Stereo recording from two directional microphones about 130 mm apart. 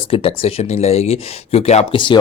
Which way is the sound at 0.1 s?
45° left (ahead or behind).